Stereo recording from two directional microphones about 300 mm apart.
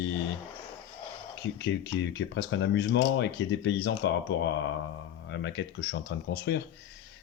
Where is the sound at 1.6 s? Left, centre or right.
Left.